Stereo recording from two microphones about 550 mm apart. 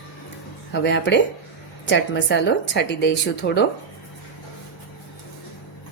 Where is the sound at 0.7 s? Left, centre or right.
Centre.